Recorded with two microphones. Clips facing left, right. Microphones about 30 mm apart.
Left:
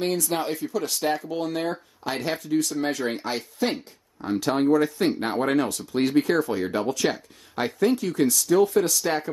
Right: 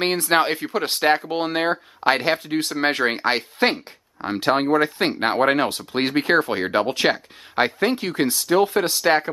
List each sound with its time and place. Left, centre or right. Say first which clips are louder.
0.0 s speech: right 6 dB; right
0.7 s speech: right 6 dB; right